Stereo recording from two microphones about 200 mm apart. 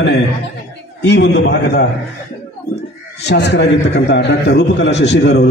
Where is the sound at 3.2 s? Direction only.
60° left (ahead or behind).